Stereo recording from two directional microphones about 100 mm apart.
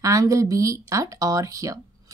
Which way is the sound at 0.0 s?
35° right (ahead or behind).